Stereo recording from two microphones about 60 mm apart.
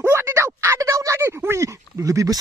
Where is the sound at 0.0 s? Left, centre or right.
Right.